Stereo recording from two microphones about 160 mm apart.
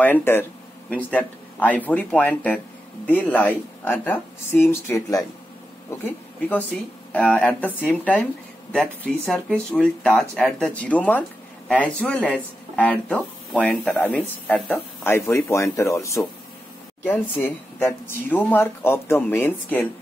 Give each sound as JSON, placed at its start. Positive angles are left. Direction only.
{"t": 0.0, "sound": "speech", "side_deg": 15}
{"t": 7.1, "sound": "speech", "side_deg": 5}